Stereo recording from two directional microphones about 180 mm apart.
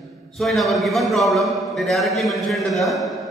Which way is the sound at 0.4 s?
Centre (ahead or behind).